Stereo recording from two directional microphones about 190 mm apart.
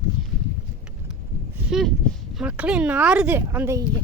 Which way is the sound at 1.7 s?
Centre (ahead or behind).